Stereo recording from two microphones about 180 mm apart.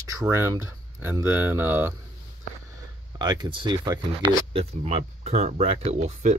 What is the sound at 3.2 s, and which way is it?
Speech, 25° right (ahead or behind).